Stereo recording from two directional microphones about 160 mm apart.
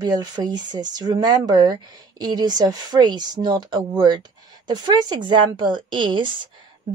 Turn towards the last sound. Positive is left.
turn(degrees=-30)  # may be behind; listen again after turning